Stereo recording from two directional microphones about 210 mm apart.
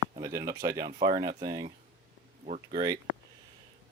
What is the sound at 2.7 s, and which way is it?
Speech, 20° right (ahead or behind).